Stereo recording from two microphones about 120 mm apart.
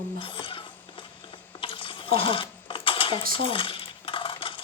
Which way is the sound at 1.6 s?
45° left (ahead or behind).